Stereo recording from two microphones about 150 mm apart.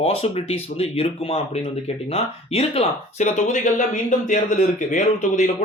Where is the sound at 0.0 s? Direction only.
40° left (ahead or behind).